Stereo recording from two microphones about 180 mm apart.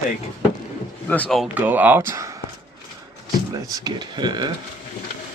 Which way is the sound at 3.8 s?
25° right (ahead or behind).